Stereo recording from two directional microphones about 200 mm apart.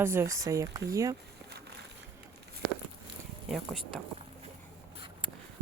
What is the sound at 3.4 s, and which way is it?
Speech, centre (ahead or behind).